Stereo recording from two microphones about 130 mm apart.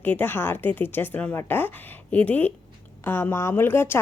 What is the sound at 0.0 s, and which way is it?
A woman's voice, 15° left (ahead or behind).